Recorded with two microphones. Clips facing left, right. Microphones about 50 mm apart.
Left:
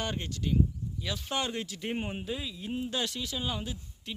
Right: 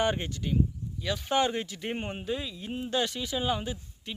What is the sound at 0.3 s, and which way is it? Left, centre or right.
Speech, centre.